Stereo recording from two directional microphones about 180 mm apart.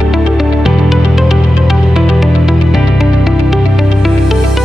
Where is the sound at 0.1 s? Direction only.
Centre (ahead or behind).